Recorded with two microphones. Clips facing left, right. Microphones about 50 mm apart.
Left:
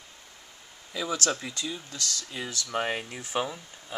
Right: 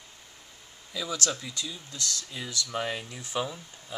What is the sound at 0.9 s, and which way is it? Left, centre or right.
Speech, left.